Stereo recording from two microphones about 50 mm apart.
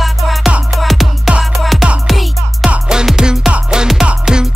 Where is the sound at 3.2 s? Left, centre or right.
Centre.